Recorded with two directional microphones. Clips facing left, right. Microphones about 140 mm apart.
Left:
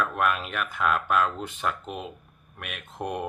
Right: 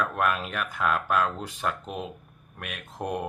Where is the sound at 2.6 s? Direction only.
35° right (ahead or behind).